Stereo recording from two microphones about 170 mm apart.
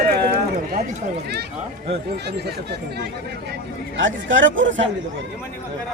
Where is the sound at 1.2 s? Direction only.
70° right (ahead or behind).